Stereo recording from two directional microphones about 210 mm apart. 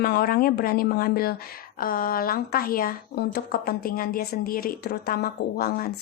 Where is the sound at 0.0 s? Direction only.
45° left (ahead or behind).